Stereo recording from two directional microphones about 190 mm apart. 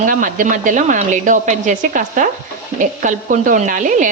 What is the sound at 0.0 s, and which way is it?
A woman's voice, 45° right (ahead or behind).